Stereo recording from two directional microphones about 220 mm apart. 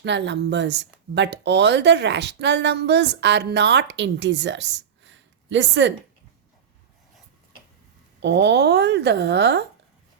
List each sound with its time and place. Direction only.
0.0 s speech: 55° right (ahead or behind)
8.2 s speech: 50° right (ahead or behind)